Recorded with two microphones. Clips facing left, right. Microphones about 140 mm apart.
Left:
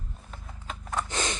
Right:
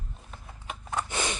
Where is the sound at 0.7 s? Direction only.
10° right (ahead or behind).